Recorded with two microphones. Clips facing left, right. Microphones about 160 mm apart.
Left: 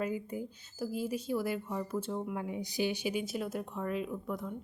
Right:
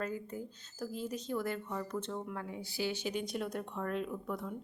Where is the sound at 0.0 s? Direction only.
10° left (ahead or behind).